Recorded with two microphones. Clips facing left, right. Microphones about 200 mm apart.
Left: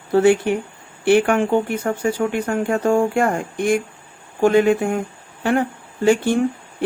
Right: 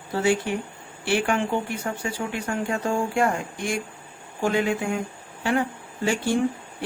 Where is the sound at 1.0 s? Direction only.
55° left (ahead or behind).